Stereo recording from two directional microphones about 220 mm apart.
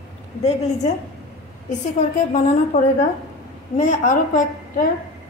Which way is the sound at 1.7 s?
35° left (ahead or behind).